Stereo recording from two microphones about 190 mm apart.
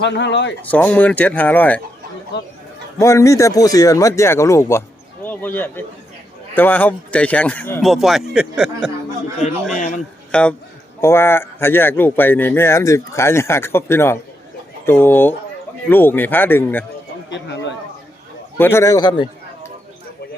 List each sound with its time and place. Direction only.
0.0 s speech: 65° left (ahead or behind)
0.6 s speech: 10° left (ahead or behind)
3.0 s speech: 15° left (ahead or behind); by 8.9 s 5° right (ahead or behind)
9.7 s a man's voice: 40° left (ahead or behind)
10.3 s speech: 5° left (ahead or behind)
17.2 s speech: 70° left (ahead or behind)
18.5 s speech: 10° left (ahead or behind)